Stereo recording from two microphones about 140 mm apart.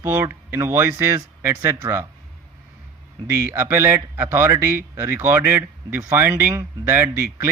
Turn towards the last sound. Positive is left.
turn(degrees=-20)  # may be behind; listen again after turning